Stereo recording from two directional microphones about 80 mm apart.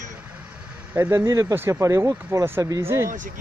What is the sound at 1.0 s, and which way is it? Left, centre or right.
Speech, right.